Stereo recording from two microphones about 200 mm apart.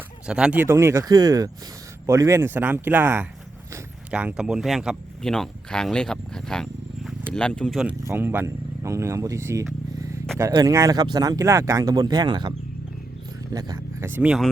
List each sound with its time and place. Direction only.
0.3 s speech: 5° right (ahead or behind)